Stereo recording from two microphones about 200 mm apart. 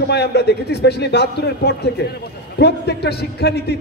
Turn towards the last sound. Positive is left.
turn(degrees=55)  # may be behind; listen again after turning